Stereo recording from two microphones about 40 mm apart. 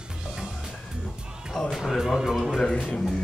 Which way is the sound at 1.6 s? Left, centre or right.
Centre.